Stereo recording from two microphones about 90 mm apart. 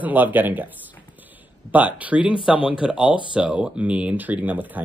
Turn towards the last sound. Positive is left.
turn(degrees=-20)  # may be behind; listen again after turning